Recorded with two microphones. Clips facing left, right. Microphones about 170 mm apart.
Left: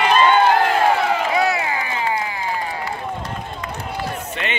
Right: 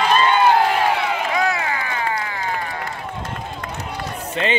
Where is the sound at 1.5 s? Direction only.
20° left (ahead or behind).